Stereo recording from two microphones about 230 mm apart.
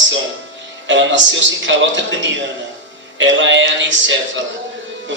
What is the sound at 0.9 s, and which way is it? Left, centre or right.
Speech, right.